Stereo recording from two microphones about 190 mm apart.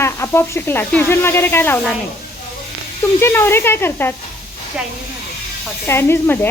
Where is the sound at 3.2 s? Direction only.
10° left (ahead or behind).